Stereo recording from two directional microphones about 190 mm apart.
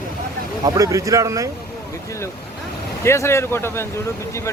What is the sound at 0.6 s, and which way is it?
Speech, 20° right (ahead or behind).